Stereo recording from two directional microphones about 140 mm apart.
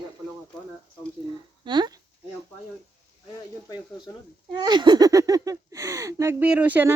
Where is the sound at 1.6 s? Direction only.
30° right (ahead or behind).